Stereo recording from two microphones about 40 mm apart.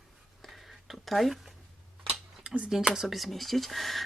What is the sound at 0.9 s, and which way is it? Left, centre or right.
Speech, centre.